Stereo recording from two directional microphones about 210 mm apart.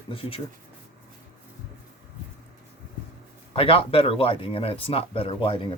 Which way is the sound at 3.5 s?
25° left (ahead or behind).